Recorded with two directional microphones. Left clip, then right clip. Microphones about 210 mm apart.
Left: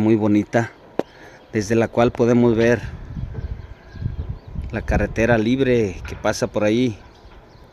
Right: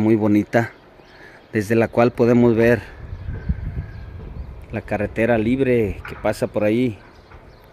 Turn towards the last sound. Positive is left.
turn(degrees=5)  # may be behind; listen again after turning